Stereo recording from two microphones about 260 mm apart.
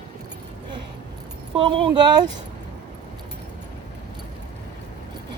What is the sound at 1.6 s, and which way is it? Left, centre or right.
Speech, centre.